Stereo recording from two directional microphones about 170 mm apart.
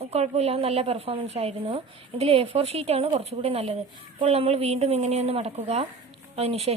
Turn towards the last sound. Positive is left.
turn(degrees=-35)  # may be behind; listen again after turning